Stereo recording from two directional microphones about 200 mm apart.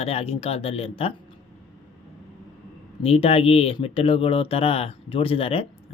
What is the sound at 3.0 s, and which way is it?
Speech, 30° left (ahead or behind).